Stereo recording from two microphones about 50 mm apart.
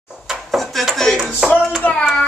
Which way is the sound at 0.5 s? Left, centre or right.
Centre.